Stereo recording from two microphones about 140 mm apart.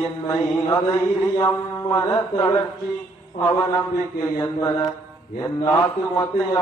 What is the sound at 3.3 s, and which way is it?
Mantra, 25° left (ahead or behind).